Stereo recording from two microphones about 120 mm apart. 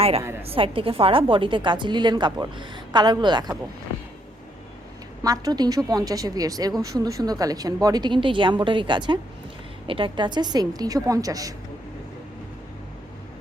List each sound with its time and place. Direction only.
0.4 s a woman's voice: 50° right (ahead or behind)
5.2 s a woman's voice: 30° right (ahead or behind)